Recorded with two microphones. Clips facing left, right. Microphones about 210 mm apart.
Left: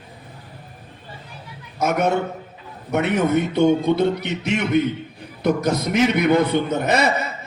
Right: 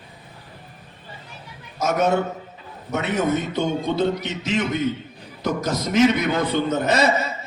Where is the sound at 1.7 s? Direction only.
60° left (ahead or behind).